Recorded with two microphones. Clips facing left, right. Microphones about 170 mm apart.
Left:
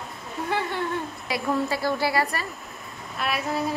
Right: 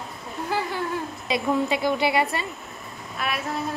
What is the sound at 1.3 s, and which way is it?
A woman's voice, 20° right (ahead or behind).